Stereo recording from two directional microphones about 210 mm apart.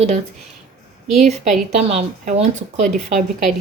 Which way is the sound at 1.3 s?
30° right (ahead or behind).